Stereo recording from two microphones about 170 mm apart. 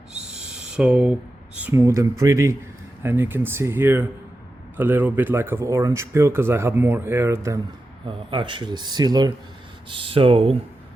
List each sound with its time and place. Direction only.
0.1 s owl: 5° right (ahead or behind)
1.5 s speech: 10° right (ahead or behind)
8.0 s speech: 30° right (ahead or behind)